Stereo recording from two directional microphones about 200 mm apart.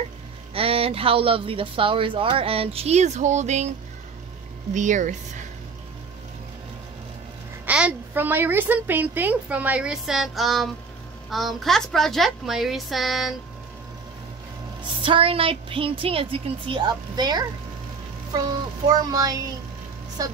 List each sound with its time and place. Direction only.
0.6 s speech: 30° right (ahead or behind)
4.7 s speech: 40° right (ahead or behind)
7.6 s a child's voice: 5° right (ahead or behind)
14.8 s speech: 25° right (ahead or behind)
18.9 s speech: 20° right (ahead or behind)